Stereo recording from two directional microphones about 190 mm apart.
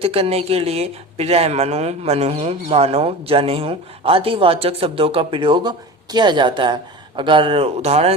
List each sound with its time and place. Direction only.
0.0 s speech: 30° right (ahead or behind)